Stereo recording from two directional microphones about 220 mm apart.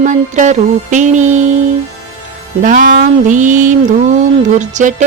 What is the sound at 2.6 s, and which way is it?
Music, 35° right (ahead or behind).